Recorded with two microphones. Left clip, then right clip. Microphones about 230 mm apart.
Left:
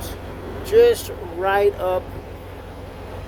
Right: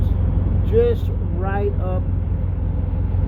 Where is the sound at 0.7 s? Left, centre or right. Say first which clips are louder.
Left 4 dB; centre.